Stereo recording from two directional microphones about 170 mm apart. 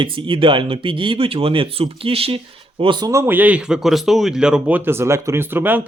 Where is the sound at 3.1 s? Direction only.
15° right (ahead or behind).